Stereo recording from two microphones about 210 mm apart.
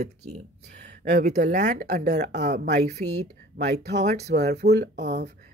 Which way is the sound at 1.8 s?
50° right (ahead or behind).